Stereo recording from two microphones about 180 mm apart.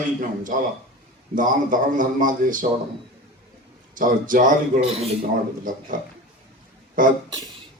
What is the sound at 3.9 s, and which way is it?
Speech, 50° right (ahead or behind).